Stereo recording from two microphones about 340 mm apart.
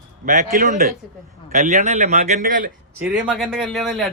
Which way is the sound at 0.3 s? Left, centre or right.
Right.